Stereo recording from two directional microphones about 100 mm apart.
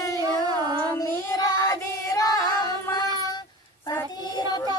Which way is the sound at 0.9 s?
35° left (ahead or behind).